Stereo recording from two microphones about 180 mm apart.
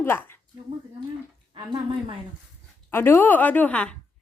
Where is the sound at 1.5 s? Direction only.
25° right (ahead or behind).